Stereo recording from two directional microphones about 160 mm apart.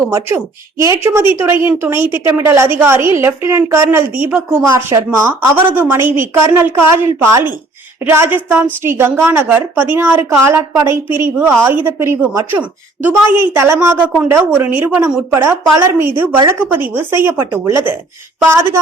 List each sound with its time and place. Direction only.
0.1 s a woman's voice: 15° right (ahead or behind)